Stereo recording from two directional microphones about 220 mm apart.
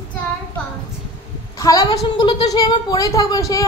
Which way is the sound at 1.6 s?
15° left (ahead or behind).